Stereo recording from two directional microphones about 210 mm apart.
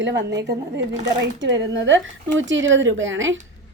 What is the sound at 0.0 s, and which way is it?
A woman's voice, 60° right (ahead or behind).